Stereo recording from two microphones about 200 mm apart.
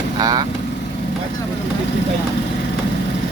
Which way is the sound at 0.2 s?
20° right (ahead or behind).